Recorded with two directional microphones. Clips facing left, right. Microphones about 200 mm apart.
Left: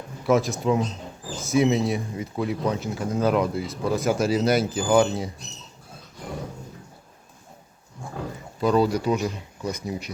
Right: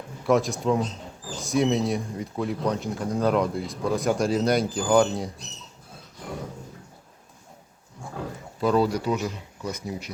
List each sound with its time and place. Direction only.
0.3 s speech: centre (ahead or behind)
8.6 s speech: centre (ahead or behind)
9.0 s speech: 15° left (ahead or behind)